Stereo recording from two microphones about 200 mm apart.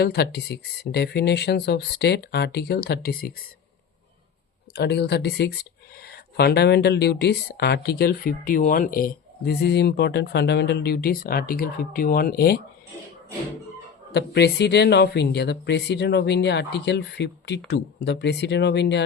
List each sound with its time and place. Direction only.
0.0 s speech: 50° left (ahead or behind)
4.7 s speech: 55° left (ahead or behind)
14.1 s speech: 55° left (ahead or behind)